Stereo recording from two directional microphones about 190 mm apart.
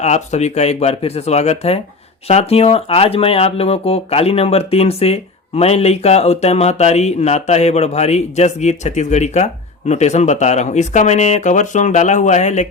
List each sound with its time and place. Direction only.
0.0 s speech: 35° left (ahead or behind)